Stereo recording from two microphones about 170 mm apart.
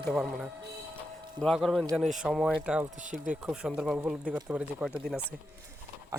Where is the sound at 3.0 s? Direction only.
50° right (ahead or behind).